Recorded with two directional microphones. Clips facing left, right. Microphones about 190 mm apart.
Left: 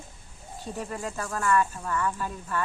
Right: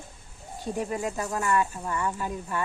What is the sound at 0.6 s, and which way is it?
Speech, 10° right (ahead or behind).